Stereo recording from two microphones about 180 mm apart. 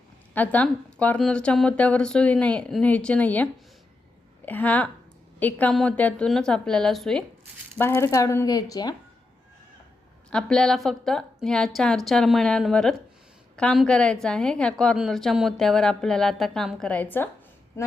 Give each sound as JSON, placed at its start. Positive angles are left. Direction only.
{"t": 0.3, "sound": "a woman's voice", "side_deg": 10}
{"t": 7.8, "sound": "speech", "side_deg": 15}
{"t": 10.2, "sound": "a woman's voice", "side_deg": 5}